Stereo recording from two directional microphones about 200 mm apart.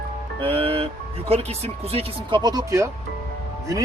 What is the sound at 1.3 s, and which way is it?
Speech, 30° right (ahead or behind).